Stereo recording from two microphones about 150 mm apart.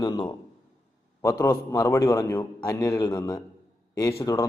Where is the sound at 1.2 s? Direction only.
15° left (ahead or behind).